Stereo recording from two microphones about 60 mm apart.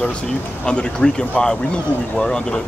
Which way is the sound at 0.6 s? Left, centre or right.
Centre.